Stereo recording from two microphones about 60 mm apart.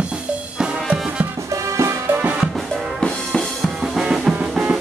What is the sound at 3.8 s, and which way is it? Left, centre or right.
Drum kit, centre.